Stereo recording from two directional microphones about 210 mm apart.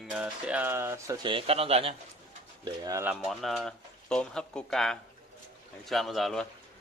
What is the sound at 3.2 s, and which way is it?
Speech, centre (ahead or behind).